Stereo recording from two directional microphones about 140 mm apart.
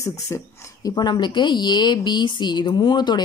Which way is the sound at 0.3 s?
20° left (ahead or behind).